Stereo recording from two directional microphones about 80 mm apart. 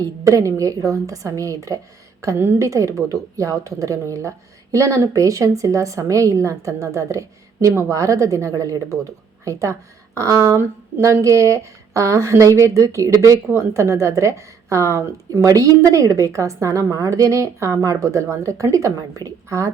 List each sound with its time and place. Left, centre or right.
0.0 s a woman's voice: right
10.6 s speech: right